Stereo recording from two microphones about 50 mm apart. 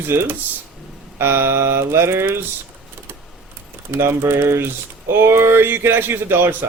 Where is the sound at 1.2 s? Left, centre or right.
Right.